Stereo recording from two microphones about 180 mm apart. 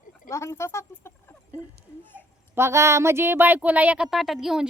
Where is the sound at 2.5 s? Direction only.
15° right (ahead or behind).